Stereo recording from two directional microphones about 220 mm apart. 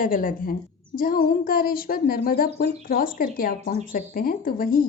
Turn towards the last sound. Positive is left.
turn(degrees=40)  # may be behind; listen again after turning